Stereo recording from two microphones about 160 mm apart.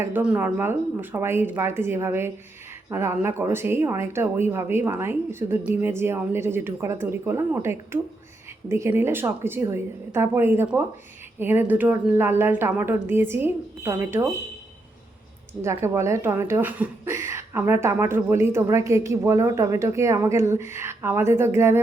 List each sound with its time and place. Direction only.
0.0 s speech: 10° right (ahead or behind)
15.6 s speech: 15° right (ahead or behind)